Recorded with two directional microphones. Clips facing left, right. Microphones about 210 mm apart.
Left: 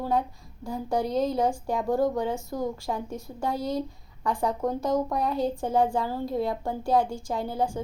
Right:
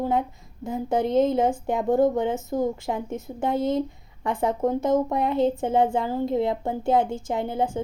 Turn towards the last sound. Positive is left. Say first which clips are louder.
# right 3 dB
turn(degrees=-20)  # may be behind; listen again after turning